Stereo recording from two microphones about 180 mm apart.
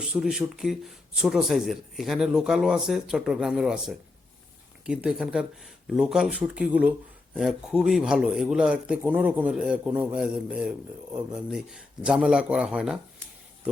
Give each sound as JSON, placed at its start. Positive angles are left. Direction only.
{"t": 0.0, "sound": "speech", "side_deg": -5}